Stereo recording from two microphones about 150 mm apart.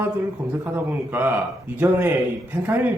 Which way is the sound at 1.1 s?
10° right (ahead or behind).